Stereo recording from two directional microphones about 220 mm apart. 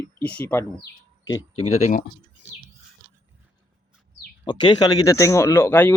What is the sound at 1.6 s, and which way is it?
Speech, 30° left (ahead or behind).